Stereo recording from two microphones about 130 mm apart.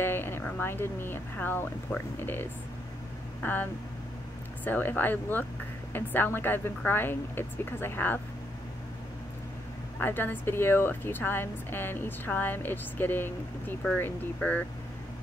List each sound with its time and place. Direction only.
0.0 s speech: 15° left (ahead or behind)
4.6 s speech: 15° left (ahead or behind)
9.9 s speech: 15° left (ahead or behind)